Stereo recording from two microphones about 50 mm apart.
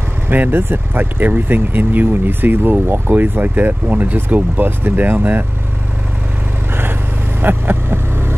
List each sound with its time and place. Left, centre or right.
0.3 s speech: right
6.7 s vehicle: right